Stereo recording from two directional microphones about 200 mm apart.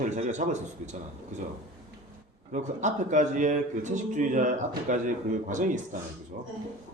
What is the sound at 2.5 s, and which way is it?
A man's voice, 40° right (ahead or behind).